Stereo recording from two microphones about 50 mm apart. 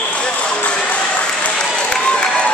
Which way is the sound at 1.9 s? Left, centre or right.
Centre.